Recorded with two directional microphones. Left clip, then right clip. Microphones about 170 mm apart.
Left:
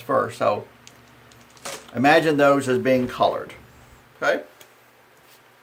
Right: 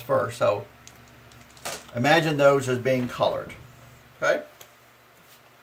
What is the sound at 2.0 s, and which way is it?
Speech, 40° left (ahead or behind).